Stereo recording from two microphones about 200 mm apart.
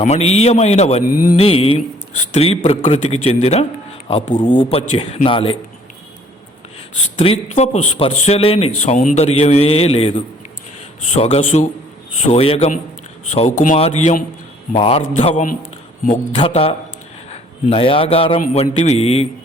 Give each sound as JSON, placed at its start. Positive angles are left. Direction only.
{"t": 0.0, "sound": "a man's voice", "side_deg": 30}
{"t": 7.2, "sound": "a man's voice", "side_deg": 30}